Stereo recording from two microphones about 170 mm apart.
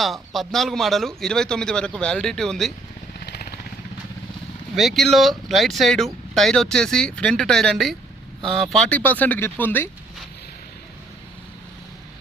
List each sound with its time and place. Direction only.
0.0 s speech: centre (ahead or behind)
3.2 s vehicle: 70° left (ahead or behind)
4.7 s speech: centre (ahead or behind)